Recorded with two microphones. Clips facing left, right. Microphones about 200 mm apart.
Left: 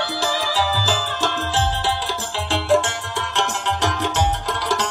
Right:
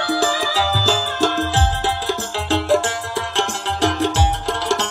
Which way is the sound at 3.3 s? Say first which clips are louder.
Left 2 dB; 30° right (ahead or behind).